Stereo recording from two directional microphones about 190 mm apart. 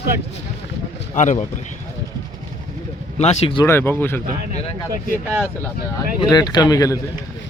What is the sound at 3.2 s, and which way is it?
Speech, 30° left (ahead or behind).